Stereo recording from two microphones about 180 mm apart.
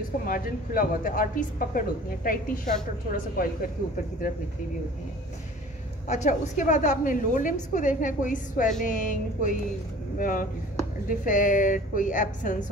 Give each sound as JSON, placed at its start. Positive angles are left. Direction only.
{"t": 0.3, "sound": "speech", "side_deg": 50}
{"t": 6.0, "sound": "speech", "side_deg": 40}